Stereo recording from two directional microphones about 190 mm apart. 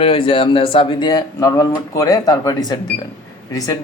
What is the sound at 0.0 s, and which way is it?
A man's voice, 30° left (ahead or behind).